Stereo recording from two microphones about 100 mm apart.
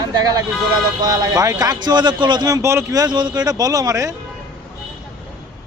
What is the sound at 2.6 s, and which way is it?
Speech, 25° right (ahead or behind).